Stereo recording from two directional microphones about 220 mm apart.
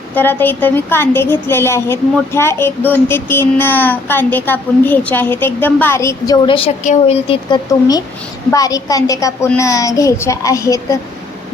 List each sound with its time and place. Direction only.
0.1 s a woman's voice: 10° left (ahead or behind)
6.8 s a woman's voice: 30° left (ahead or behind); by 10.8 s 15° left (ahead or behind)